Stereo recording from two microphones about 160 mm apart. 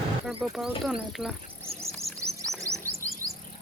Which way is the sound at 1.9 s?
Centre (ahead or behind).